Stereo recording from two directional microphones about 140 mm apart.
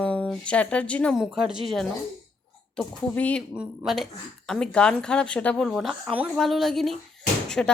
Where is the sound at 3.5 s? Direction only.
5° right (ahead or behind).